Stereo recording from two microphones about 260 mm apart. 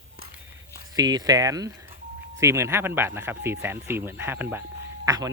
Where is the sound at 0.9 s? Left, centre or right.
Centre.